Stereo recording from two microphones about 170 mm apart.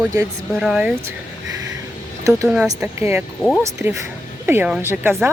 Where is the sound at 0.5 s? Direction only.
5° right (ahead or behind).